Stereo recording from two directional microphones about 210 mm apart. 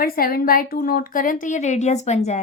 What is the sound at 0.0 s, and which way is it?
A woman's voice, 45° left (ahead or behind).